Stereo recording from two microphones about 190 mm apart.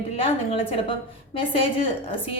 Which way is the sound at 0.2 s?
30° left (ahead or behind).